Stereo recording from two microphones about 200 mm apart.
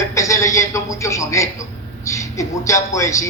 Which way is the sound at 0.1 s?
15° left (ahead or behind).